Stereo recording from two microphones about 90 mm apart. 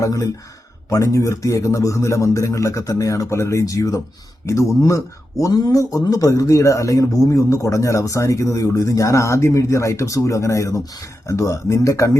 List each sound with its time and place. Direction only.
0.0 s a man's voice: 40° left (ahead or behind)